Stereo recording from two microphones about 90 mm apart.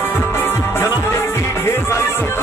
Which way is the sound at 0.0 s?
25° left (ahead or behind).